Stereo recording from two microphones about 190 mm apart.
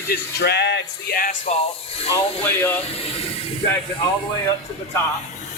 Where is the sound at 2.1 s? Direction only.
10° left (ahead or behind).